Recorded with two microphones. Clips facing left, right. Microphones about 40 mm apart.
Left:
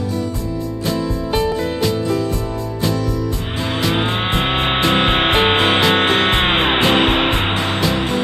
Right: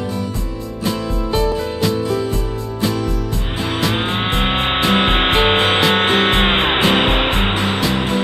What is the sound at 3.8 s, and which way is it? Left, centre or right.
Music, centre.